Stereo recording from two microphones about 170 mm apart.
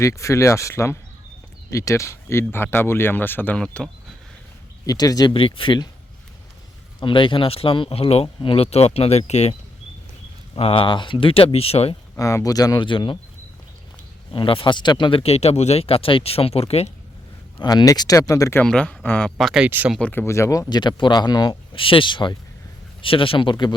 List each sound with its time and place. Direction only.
0.0 s speech: 15° left (ahead or behind)
4.9 s speech: 20° left (ahead or behind)
7.0 s speech: 30° left (ahead or behind)
12.1 s speech: 20° left (ahead or behind)
14.3 s speech: 30° left (ahead or behind)
17.6 s speech: 25° left (ahead or behind)
18.6 s speech: 5° left (ahead or behind)
20.0 s speech: 10° left (ahead or behind); by 23.7 s 30° left (ahead or behind)